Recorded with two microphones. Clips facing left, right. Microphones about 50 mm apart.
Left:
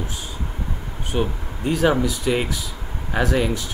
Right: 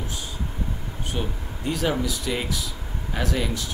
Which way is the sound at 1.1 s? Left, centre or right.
Left.